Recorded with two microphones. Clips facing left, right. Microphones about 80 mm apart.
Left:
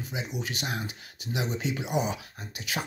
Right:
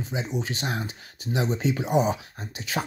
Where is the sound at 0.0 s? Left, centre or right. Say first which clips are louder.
Right 5 dB; right.